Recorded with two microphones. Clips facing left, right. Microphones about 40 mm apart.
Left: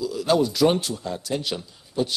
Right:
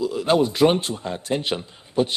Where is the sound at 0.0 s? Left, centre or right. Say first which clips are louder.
Right 2 dB; right.